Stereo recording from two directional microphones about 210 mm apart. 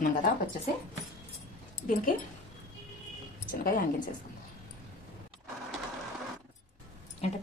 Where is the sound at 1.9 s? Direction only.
40° left (ahead or behind).